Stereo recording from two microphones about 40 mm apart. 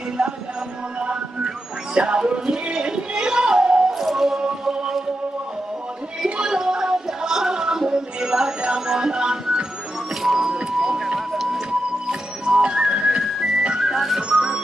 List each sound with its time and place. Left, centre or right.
0.2 s music: centre
4.0 s music: centre
4.4 s music: centre
6.4 s music: centre
10.2 s music: centre
10.8 s a sound: centre
12.1 s music: centre
13.7 s music: centre